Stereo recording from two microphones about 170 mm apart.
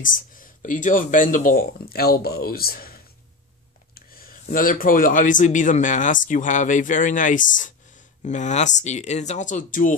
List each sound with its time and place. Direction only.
0.0 s speech: 55° left (ahead or behind)